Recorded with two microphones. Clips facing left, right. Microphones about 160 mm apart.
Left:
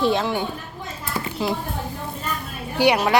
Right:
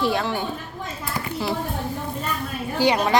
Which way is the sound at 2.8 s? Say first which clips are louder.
Left 2 dB; 10° left (ahead or behind).